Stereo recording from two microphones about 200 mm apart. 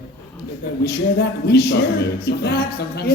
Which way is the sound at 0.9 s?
55° left (ahead or behind).